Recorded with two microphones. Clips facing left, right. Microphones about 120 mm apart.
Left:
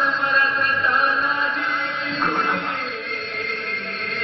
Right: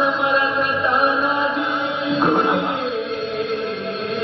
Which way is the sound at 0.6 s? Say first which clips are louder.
Right 3 dB; 15° right (ahead or behind).